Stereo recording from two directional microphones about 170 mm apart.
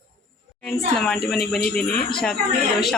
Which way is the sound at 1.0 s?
Centre (ahead or behind).